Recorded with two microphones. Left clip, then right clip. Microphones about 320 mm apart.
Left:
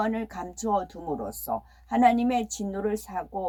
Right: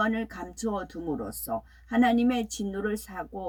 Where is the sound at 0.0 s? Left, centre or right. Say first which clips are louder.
Even; centre.